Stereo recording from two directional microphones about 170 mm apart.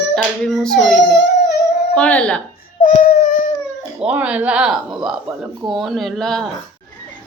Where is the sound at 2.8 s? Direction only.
50° left (ahead or behind).